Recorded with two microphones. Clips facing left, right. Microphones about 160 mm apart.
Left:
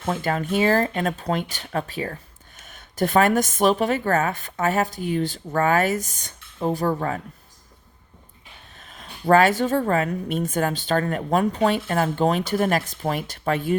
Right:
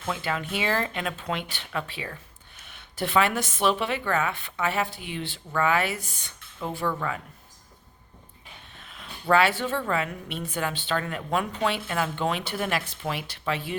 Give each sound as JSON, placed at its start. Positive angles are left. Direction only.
{"t": 0.0, "sound": "speech", "side_deg": 45}
{"t": 8.7, "sound": "speech", "side_deg": 40}